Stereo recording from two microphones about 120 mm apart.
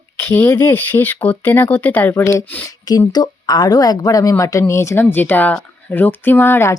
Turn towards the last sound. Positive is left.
turn(degrees=20)  # may be behind; listen again after turning